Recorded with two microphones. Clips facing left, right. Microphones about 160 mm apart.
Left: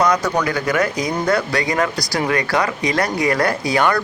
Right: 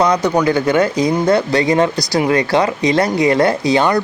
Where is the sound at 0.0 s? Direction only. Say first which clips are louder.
Right 4 dB; 25° right (ahead or behind).